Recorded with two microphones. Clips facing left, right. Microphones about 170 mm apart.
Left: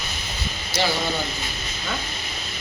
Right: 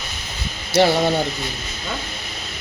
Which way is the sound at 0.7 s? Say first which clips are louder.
Right 9 dB; 70° right (ahead or behind).